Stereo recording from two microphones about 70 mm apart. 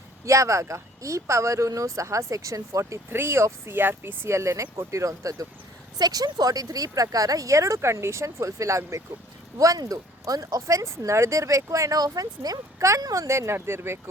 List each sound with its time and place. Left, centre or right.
0.3 s speech: right
3.1 s speech: right
4.4 s speech: right
6.0 s speech: right
13.2 s speech: right